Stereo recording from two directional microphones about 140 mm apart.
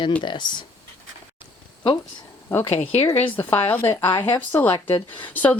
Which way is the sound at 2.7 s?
45° left (ahead or behind).